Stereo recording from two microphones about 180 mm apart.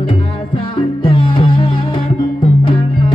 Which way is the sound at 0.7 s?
25° left (ahead or behind).